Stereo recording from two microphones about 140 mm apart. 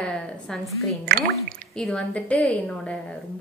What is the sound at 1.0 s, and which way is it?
Speech, 90° right.